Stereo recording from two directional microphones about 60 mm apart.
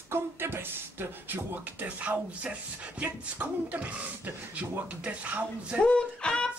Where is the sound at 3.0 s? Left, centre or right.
Right.